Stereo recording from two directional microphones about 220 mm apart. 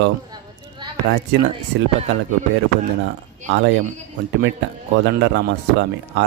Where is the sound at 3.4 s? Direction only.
55° right (ahead or behind).